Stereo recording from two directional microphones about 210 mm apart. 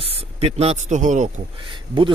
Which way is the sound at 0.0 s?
30° right (ahead or behind).